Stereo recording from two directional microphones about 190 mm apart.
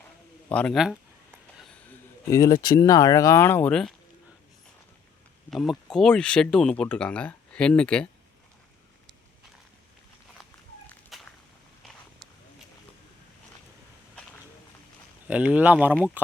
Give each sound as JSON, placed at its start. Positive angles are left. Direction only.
{"t": 0.4, "sound": "speech", "side_deg": 5}
{"t": 2.3, "sound": "speech", "side_deg": 20}
{"t": 5.5, "sound": "speech", "side_deg": 0}
{"t": 10.8, "sound": "walk", "side_deg": 5}
{"t": 15.3, "sound": "speech", "side_deg": -5}